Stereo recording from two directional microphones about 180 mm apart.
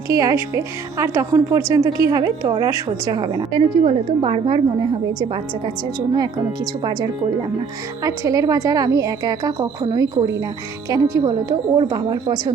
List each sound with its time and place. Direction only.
0.1 s a woman's voice: 20° right (ahead or behind)
8.0 s a woman's voice: 20° right (ahead or behind)